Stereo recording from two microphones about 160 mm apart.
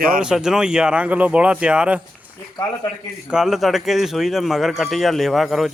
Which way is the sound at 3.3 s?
Centre (ahead or behind).